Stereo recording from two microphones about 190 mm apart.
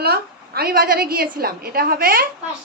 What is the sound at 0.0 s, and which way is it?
A woman's voice, 55° right (ahead or behind).